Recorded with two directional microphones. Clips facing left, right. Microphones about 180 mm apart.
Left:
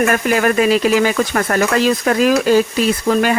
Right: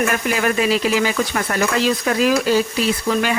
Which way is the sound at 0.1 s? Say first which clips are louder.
Left 5 dB; 50° left (ahead or behind).